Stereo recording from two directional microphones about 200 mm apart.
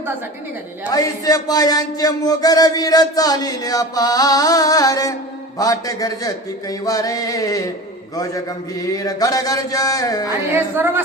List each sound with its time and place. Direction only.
0.9 s speech: 15° left (ahead or behind)
5.5 s mantra: 15° left (ahead or behind)
10.5 s speech: 10° right (ahead or behind)